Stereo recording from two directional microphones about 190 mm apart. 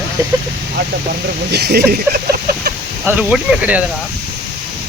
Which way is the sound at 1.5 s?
60° right (ahead or behind).